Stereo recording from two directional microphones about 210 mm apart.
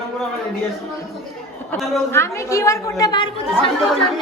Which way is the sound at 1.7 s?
10° left (ahead or behind).